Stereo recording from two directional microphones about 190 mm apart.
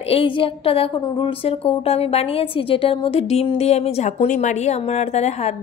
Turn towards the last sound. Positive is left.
turn(degrees=35)  # may be behind; listen again after turning